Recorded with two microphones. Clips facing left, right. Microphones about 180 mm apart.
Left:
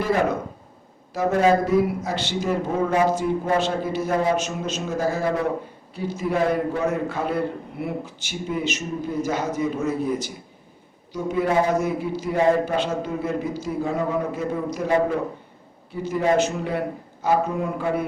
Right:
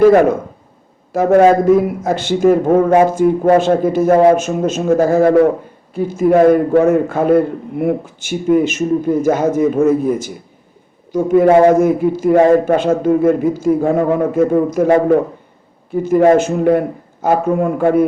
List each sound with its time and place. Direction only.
0.0 s a man's voice: 55° right (ahead or behind)